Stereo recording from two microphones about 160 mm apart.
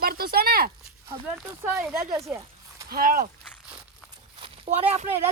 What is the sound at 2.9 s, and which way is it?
Speech, 65° right (ahead or behind).